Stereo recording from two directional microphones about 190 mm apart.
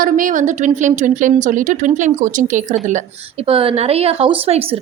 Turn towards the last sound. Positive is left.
turn(degrees=-30)  # may be behind; listen again after turning